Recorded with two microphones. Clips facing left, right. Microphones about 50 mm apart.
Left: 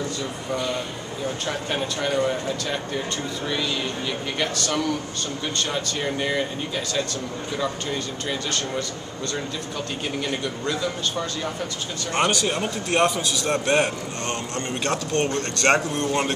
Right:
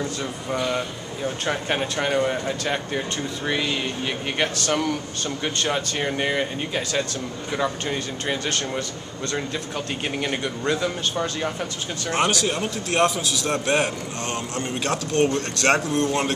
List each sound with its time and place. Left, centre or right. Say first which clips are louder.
1.4 s speech: right 4 dB; right
8.3 s speech: right 2 dB; right
10.2 s speech: right 4 dB; right
12.1 s a man's voice: even; centre